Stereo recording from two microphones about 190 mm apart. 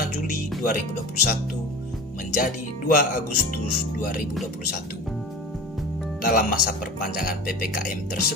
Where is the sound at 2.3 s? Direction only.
45° left (ahead or behind).